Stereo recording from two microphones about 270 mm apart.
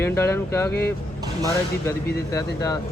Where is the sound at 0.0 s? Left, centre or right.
Centre.